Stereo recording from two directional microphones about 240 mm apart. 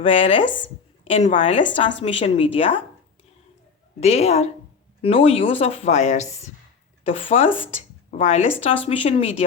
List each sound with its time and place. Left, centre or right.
0.0 s speech: left
4.0 s speech: left